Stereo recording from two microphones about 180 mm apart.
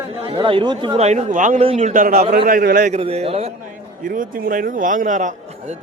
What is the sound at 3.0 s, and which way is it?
Speech, 30° right (ahead or behind).